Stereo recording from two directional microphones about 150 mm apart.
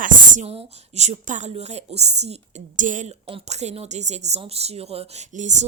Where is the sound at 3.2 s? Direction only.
40° right (ahead or behind).